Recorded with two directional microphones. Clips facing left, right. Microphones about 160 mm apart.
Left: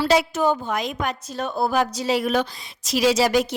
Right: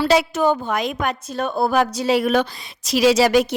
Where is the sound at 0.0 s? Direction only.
75° right (ahead or behind).